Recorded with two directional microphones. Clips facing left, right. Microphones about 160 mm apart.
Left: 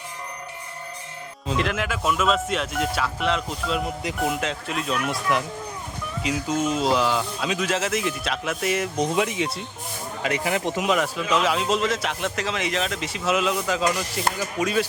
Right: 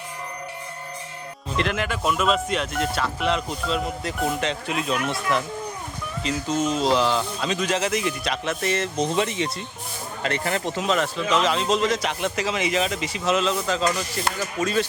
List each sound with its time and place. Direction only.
1.5 s speech: centre (ahead or behind)
5.0 s speech: 10° left (ahead or behind)